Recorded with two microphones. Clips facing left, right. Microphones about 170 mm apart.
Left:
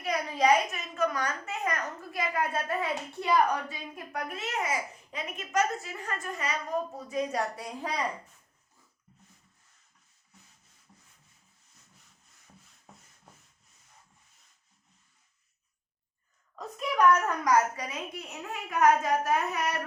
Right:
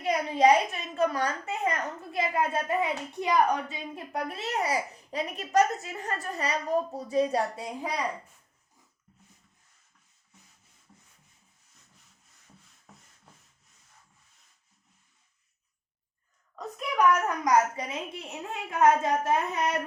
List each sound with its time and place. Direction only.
0.0 s a child's voice: 25° right (ahead or behind)
16.6 s a child's voice: centre (ahead or behind); by 19.8 s 25° right (ahead or behind)